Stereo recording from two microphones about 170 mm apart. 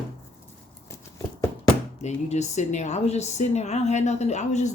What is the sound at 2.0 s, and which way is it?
A woman's voice, 40° left (ahead or behind).